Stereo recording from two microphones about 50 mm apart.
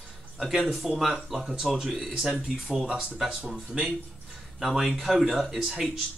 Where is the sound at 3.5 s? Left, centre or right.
Centre.